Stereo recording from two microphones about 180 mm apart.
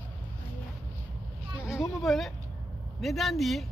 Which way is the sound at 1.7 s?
Centre (ahead or behind).